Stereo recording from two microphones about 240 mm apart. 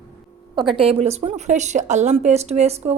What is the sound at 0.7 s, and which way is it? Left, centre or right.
Speech, right.